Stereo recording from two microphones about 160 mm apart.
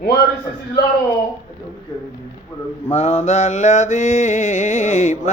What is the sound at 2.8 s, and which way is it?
Mantra, 40° left (ahead or behind).